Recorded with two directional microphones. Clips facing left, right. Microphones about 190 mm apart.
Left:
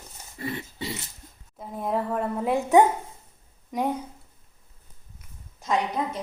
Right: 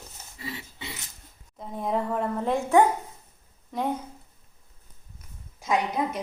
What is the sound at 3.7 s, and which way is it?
Speech, 15° left (ahead or behind).